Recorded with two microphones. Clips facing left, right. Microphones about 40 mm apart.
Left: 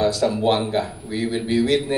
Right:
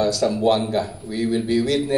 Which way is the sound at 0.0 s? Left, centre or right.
Left.